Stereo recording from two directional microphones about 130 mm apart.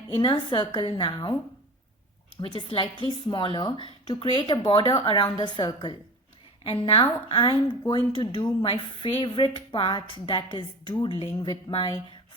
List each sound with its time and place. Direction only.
0.1 s a woman's voice: 35° left (ahead or behind)
2.6 s a woman's voice: 40° left (ahead or behind)